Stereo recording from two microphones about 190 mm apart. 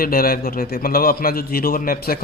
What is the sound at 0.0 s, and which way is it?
Speech, 50° left (ahead or behind).